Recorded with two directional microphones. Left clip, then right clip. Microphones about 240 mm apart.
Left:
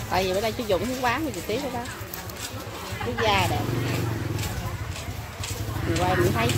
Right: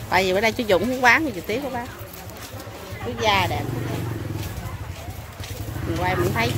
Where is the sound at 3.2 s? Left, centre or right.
Centre.